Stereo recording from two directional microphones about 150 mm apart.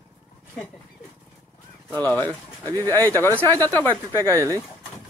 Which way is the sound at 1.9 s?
10° left (ahead or behind).